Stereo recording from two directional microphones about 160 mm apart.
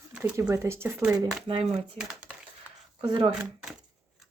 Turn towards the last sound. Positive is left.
turn(degrees=-5)  # may be behind; listen again after turning